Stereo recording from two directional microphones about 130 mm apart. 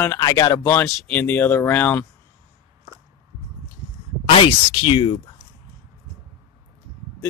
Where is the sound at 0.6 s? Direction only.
20° left (ahead or behind).